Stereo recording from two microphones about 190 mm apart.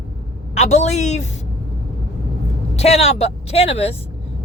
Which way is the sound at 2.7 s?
35° left (ahead or behind).